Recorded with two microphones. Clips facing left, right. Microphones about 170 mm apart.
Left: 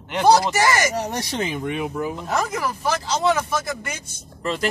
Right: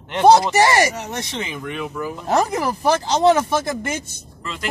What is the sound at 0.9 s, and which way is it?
Speech, 35° left (ahead or behind).